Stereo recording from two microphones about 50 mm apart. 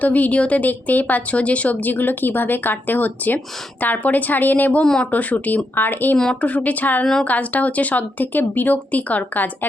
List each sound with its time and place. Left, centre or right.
0.0 s a woman's voice: left
5.7 s a woman's voice: left
6.4 s a woman's voice: left